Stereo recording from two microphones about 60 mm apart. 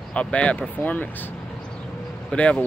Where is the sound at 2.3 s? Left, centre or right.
Centre.